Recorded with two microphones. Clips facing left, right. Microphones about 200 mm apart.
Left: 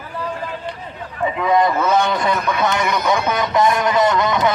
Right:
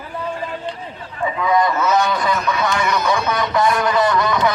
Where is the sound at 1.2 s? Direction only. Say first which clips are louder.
Left 1 dB; 25° left (ahead or behind).